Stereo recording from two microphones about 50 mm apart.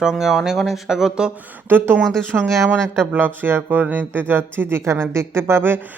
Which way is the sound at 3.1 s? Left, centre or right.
Right.